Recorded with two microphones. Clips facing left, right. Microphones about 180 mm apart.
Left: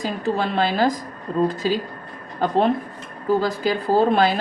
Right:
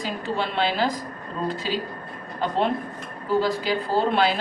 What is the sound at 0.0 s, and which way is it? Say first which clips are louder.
A woman's voice: left 4 dB; 45° left (ahead or behind).